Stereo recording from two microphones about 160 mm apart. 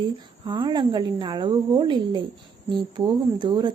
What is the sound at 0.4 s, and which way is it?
Speech, 30° right (ahead or behind).